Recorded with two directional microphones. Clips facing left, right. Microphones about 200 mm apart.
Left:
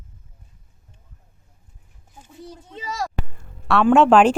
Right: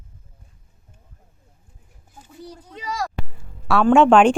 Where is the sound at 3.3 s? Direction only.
Centre (ahead or behind).